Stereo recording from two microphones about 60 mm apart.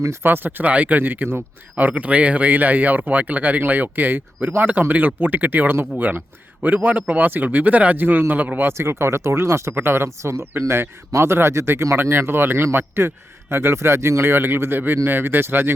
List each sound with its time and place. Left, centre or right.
0.2 s speech: right
1.7 s speech: right
8.8 s a man's voice: right